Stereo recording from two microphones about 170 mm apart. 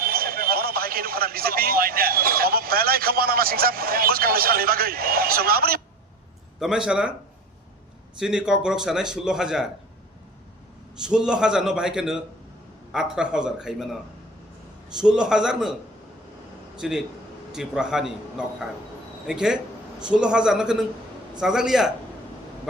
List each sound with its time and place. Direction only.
0.0 s speech: 60° right (ahead or behind)
6.6 s a man's voice: 5° right (ahead or behind)
8.2 s a man's voice: 5° right (ahead or behind)
11.0 s a man's voice: 5° right (ahead or behind)
14.9 s a man's voice: 5° right (ahead or behind)
16.7 s a man's voice: 5° right (ahead or behind)